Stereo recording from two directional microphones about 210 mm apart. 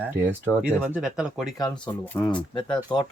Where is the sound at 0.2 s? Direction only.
10° right (ahead or behind).